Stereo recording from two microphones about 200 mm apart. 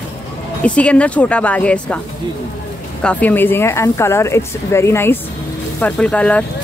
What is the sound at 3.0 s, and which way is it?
Speech, 5° left (ahead or behind).